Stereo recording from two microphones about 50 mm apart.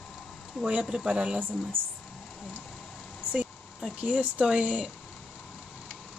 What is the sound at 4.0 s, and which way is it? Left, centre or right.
Speech, right.